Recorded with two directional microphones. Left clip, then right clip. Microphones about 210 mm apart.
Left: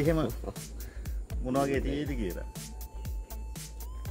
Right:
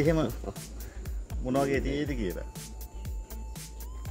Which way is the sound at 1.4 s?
5° right (ahead or behind).